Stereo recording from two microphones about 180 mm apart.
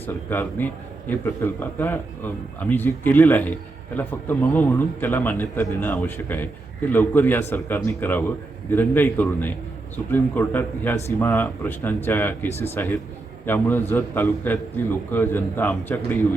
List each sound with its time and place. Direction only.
0.1 s a man's voice: 10° left (ahead or behind)
12.5 s speech: 35° left (ahead or behind)
12.7 s a man's voice: 10° left (ahead or behind)